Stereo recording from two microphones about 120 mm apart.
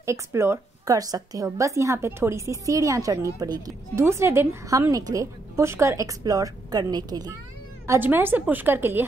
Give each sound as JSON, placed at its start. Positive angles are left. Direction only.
{"t": 0.0, "sound": "a woman's voice", "side_deg": -25}
{"t": 7.8, "sound": "a woman's voice", "side_deg": -20}